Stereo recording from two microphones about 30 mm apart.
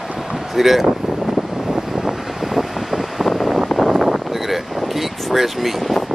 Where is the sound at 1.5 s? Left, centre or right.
Centre.